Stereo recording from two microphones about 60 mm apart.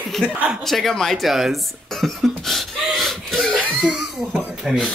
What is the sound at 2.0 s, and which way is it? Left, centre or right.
Cough, centre.